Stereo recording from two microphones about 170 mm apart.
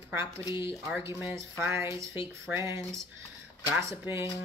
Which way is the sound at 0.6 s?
15° right (ahead or behind).